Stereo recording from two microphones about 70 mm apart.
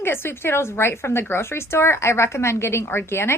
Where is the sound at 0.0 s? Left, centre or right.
Left.